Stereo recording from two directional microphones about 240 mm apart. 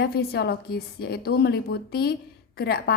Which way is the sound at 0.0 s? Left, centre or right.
Left.